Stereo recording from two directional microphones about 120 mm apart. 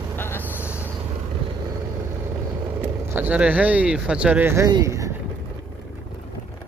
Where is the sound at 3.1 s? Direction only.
15° right (ahead or behind).